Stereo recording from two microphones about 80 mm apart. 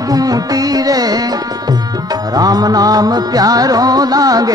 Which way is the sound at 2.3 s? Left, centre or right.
Right.